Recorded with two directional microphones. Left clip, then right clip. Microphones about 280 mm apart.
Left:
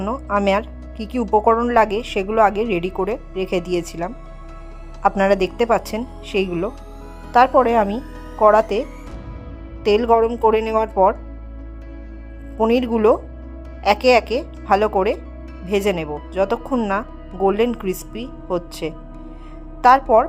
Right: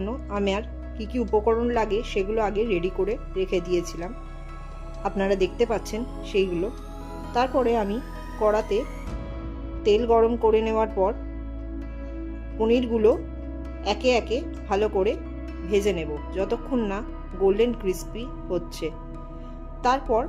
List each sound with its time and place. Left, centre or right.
0.0 s speech: centre
9.8 s speech: centre
12.5 s speech: centre